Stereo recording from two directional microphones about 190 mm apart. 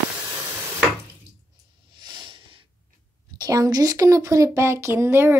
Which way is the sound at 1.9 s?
25° right (ahead or behind).